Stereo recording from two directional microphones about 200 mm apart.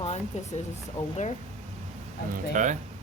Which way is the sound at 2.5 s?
40° right (ahead or behind).